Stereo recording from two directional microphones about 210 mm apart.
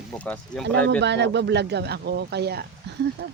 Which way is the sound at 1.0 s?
55° right (ahead or behind).